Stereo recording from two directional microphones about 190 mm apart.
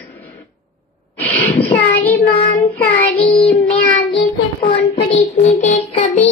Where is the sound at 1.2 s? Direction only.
10° left (ahead or behind).